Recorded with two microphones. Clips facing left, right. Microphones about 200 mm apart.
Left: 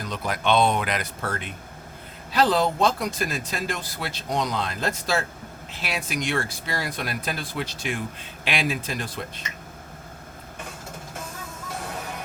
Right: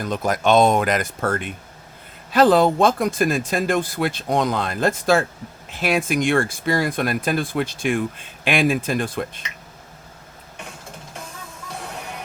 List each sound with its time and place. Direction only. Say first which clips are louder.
0.0 s speech: right 6 dB; 45° right (ahead or behind)